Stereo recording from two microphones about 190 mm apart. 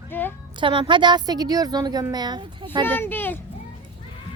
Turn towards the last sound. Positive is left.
turn(degrees=10)  # may be behind; listen again after turning